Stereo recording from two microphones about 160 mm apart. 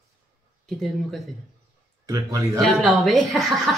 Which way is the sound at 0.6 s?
Centre (ahead or behind).